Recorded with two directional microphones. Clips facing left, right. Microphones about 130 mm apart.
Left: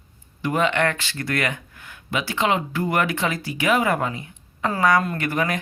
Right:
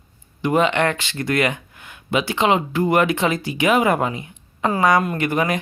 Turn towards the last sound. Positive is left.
turn(degrees=-20)  # may be behind; listen again after turning